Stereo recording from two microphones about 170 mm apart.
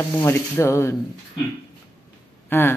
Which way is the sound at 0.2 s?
15° left (ahead or behind).